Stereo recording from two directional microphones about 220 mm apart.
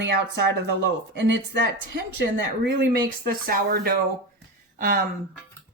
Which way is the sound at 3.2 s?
40° right (ahead or behind).